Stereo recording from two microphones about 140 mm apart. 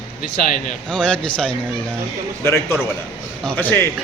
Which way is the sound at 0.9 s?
5° left (ahead or behind).